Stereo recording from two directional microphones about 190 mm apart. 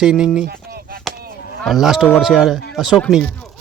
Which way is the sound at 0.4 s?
55° right (ahead or behind).